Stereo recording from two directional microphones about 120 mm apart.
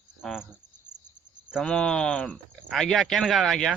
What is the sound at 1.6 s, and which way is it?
A man's voice, 10° left (ahead or behind).